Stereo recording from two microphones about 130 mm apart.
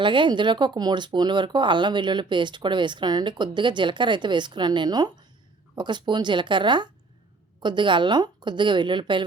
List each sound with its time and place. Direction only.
0.0 s speech: 40° right (ahead or behind)